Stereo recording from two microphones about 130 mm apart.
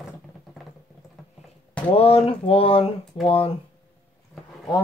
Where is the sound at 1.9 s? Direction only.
50° left (ahead or behind).